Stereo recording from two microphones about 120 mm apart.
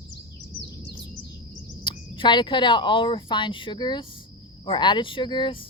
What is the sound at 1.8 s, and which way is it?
Speech, 40° left (ahead or behind).